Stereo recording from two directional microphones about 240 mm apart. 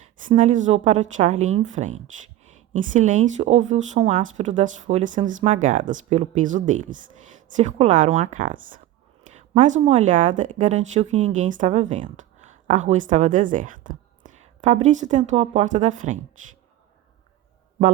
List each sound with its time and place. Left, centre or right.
0.3 s a woman's voice: right